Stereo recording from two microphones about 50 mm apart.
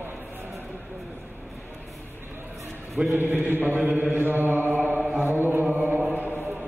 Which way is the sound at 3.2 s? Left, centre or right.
Right.